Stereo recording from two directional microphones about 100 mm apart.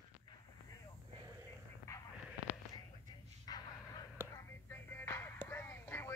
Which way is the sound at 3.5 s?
40° left (ahead or behind).